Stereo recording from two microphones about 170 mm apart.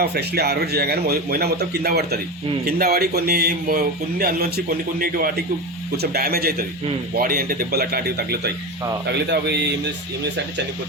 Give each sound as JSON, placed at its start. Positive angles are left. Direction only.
{"t": 0.0, "sound": "a man's voice", "side_deg": -70}
{"t": 9.3, "sound": "speech", "side_deg": -90}